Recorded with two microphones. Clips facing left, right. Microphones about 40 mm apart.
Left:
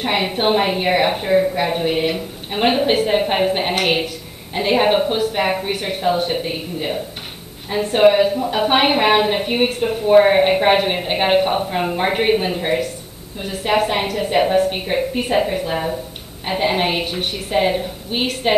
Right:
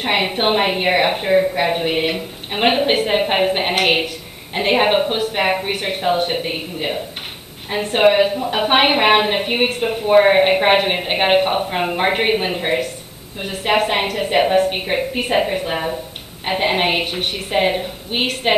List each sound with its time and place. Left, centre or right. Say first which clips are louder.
0.0 s a woman's voice: right 1 dB; right